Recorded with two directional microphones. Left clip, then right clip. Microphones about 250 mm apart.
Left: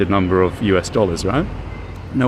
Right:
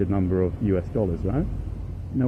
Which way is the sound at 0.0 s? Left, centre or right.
Centre.